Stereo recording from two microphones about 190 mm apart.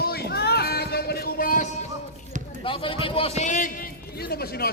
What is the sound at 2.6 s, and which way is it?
A man's voice, 30° left (ahead or behind).